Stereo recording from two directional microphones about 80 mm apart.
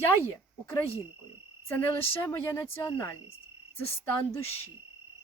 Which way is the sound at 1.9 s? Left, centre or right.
Left.